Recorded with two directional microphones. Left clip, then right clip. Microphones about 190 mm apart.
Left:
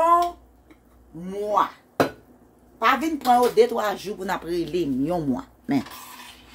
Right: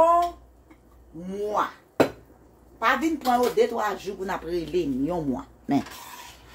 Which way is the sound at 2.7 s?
65° left (ahead or behind).